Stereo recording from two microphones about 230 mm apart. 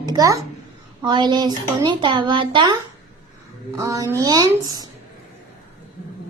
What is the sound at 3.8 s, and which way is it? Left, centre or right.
Speech, centre.